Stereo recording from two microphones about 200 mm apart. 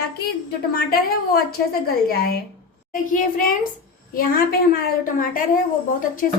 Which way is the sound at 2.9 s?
45° left (ahead or behind).